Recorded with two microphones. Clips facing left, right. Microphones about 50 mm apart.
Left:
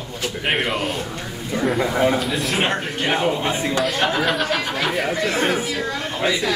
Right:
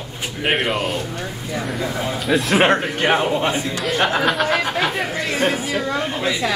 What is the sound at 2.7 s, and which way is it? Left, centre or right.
Speech, right.